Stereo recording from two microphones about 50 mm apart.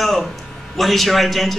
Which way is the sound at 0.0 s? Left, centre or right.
Centre.